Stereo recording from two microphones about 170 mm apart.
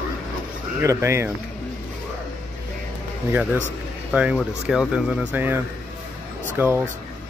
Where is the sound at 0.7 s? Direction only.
15° right (ahead or behind).